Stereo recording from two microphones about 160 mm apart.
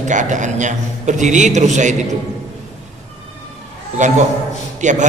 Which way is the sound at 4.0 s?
50° right (ahead or behind).